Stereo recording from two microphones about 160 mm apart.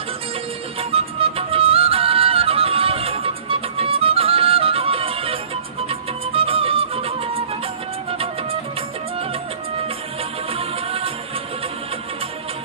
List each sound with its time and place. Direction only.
0.7 s music: 35° right (ahead or behind)
10.5 s music: 35° right (ahead or behind)